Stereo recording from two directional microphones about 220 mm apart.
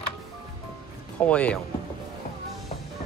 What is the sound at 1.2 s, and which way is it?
Speech, 5° left (ahead or behind).